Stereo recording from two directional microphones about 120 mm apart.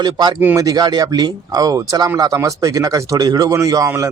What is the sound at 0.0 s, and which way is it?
Speech, 35° right (ahead or behind).